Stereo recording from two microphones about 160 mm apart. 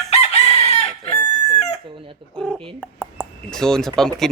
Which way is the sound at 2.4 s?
5° left (ahead or behind).